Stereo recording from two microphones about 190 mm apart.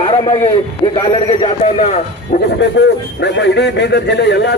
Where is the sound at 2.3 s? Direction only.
45° left (ahead or behind).